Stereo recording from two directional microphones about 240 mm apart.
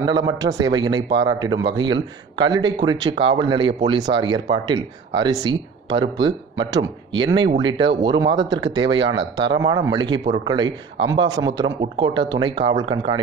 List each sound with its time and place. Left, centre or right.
0.0 s speech: centre
6.7 s speech: centre